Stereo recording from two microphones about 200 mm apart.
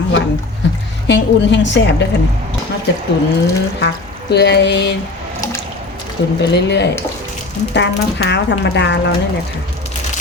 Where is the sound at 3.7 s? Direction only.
60° left (ahead or behind).